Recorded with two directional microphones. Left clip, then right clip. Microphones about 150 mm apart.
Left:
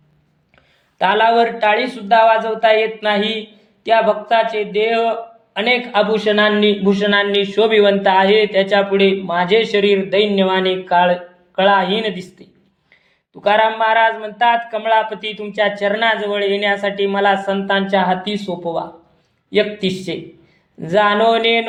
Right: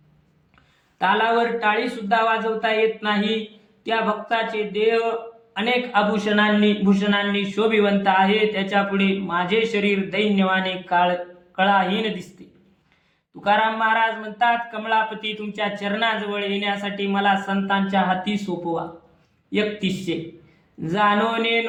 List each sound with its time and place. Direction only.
0.9 s speech: 30° left (ahead or behind)
12.4 s a sound: 25° left (ahead or behind)
13.4 s speech: 25° left (ahead or behind)
19.5 s speech: 25° left (ahead or behind)